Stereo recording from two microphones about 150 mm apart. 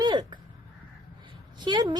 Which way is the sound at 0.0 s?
30° right (ahead or behind).